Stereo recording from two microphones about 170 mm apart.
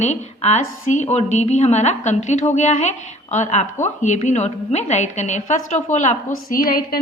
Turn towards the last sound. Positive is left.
turn(degrees=55)  # may be behind; listen again after turning